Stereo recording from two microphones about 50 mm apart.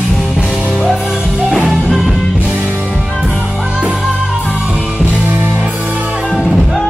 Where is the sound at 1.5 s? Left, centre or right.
Centre.